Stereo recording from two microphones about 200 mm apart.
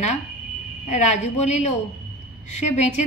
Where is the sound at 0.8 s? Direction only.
35° left (ahead or behind).